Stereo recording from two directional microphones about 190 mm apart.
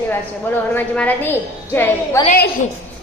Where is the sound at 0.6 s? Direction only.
10° left (ahead or behind).